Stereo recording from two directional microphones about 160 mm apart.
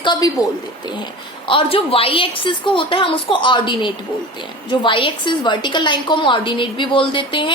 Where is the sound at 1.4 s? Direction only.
35° left (ahead or behind).